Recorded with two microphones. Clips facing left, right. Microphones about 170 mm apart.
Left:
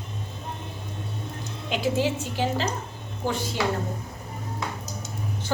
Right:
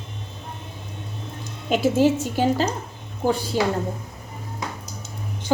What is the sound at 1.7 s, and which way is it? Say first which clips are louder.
A woman's voice: right 7 dB; 45° right (ahead or behind).